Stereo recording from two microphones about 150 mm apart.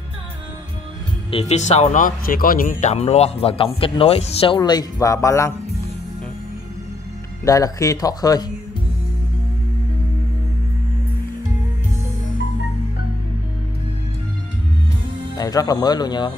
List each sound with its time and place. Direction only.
1.3 s speech: 50° left (ahead or behind)
4.6 s speech: 25° left (ahead or behind)
7.4 s speech: 20° left (ahead or behind)
15.3 s speech: 25° left (ahead or behind)